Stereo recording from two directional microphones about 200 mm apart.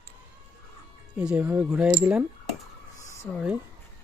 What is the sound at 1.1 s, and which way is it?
Speech, 5° right (ahead or behind).